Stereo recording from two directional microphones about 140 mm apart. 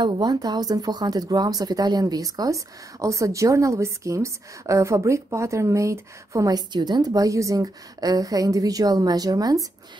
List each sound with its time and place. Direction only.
0.0 s speech: 30° right (ahead or behind)